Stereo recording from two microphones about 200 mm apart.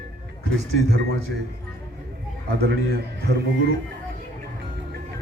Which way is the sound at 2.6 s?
55° right (ahead or behind).